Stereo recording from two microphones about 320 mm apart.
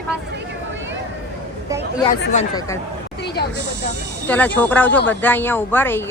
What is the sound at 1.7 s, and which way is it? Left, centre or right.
Speech, centre.